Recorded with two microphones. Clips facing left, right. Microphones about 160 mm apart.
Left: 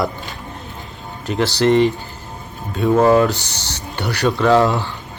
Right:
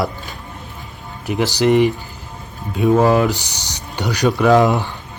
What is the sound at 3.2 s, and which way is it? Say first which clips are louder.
Speech: left 1 dB; 15° right (ahead or behind).